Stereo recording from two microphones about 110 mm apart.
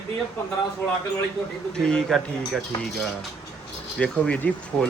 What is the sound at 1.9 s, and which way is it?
Speech, 5° left (ahead or behind).